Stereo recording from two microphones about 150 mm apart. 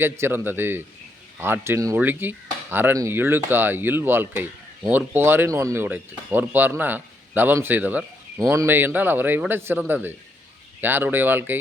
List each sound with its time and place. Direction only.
0.0 s speech: 15° right (ahead or behind)